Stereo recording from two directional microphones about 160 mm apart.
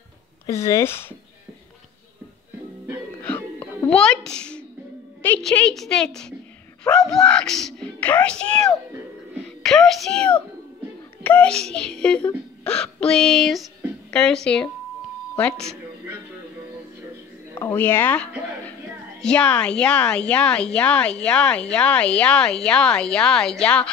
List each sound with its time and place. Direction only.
0.5 s a woman's voice: 15° left (ahead or behind)
3.2 s music: 10° left (ahead or behind)
5.2 s a child's voice: 10° left (ahead or behind)
17.6 s a woman's voice: 10° left (ahead or behind)